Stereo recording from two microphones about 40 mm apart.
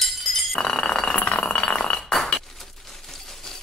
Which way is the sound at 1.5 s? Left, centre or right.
Left.